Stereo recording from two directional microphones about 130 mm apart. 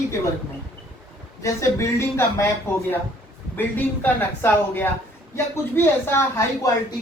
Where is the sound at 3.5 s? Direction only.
15° left (ahead or behind).